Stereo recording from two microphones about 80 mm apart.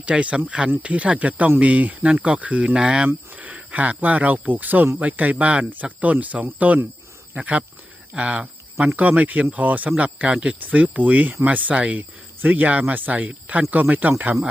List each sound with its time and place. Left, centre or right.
0.0 s speech: centre